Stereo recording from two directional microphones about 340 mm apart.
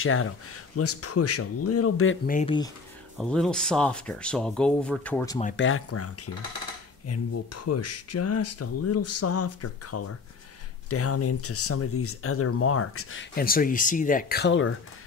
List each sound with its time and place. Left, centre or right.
0.0 s speech: left
2.2 s speech: centre
3.2 s speech: centre
5.4 s speech: left
5.7 s speech: left